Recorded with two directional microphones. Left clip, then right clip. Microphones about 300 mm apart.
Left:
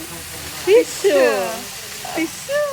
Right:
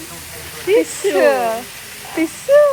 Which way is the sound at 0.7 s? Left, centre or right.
Centre.